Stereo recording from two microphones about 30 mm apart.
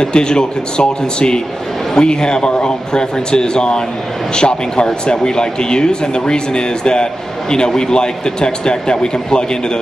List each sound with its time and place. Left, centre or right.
0.0 s speech: left